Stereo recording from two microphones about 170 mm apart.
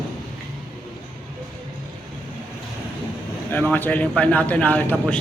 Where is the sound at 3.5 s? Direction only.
10° left (ahead or behind).